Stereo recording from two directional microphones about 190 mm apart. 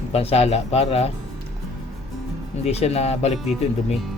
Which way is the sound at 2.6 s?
35° left (ahead or behind).